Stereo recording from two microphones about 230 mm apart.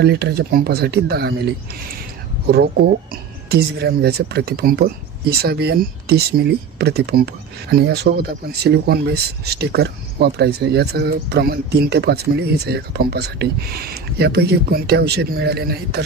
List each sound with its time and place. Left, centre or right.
0.0 s speech: right